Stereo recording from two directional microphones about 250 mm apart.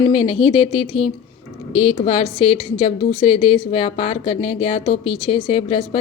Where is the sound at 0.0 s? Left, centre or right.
Left.